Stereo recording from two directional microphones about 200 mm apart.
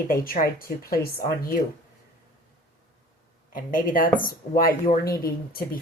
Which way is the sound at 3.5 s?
45° left (ahead or behind).